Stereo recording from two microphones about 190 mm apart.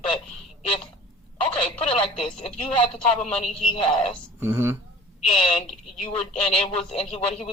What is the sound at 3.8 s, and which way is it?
Speech, 25° left (ahead or behind).